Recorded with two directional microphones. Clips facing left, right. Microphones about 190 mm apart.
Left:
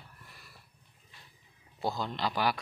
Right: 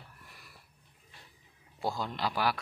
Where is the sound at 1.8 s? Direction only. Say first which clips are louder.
Left 1 dB; 10° right (ahead or behind).